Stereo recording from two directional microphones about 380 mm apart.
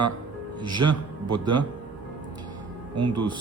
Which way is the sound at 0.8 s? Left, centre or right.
Right.